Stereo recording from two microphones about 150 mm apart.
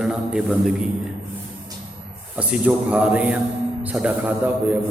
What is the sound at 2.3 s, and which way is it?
A man's voice, 10° right (ahead or behind).